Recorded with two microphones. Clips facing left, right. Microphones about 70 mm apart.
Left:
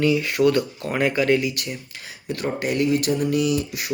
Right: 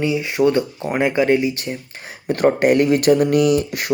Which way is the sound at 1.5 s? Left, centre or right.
Right.